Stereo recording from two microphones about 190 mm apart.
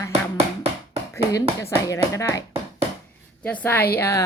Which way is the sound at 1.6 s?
15° left (ahead or behind).